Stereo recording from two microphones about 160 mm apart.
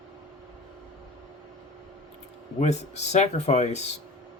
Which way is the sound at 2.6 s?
45° left (ahead or behind).